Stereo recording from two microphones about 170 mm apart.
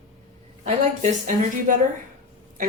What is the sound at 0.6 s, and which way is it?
A woman's voice, 45° right (ahead or behind).